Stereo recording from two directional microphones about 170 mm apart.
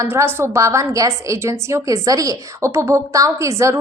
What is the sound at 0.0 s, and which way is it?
A woman's voice, 15° right (ahead or behind).